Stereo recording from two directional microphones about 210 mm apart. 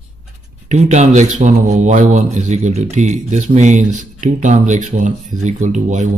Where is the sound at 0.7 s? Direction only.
30° right (ahead or behind).